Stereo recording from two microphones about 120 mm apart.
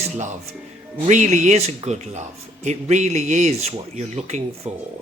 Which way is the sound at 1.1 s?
80° right.